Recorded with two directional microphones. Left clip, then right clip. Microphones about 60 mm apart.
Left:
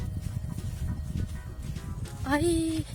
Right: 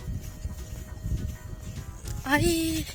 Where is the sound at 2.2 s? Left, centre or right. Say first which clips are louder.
Right 2 dB; left.